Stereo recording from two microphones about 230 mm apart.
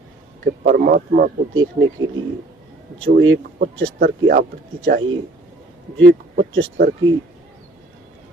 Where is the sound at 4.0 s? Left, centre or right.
Right.